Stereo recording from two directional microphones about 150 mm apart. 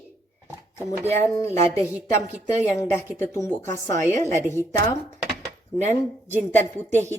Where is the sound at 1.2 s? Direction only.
20° left (ahead or behind).